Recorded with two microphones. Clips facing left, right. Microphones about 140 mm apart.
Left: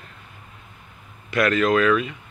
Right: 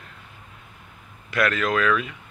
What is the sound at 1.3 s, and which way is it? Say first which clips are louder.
Speech: left 4 dB; centre (ahead or behind).